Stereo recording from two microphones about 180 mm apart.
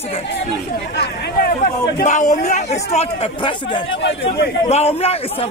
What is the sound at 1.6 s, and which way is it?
A man's voice, 45° left (ahead or behind).